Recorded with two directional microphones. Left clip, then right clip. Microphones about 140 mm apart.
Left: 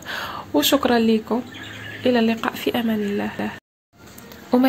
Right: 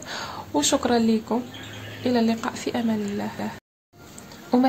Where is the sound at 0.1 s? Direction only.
15° left (ahead or behind).